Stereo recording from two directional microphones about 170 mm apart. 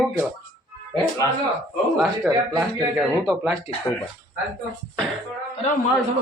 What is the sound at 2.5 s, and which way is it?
Speech, centre (ahead or behind).